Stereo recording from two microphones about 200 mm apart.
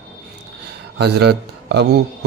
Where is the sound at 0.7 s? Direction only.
55° right (ahead or behind).